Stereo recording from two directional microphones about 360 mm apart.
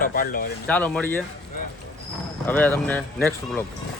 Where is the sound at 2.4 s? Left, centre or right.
Centre.